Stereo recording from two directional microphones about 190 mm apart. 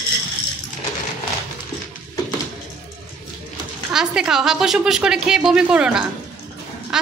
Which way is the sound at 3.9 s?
5° right (ahead or behind).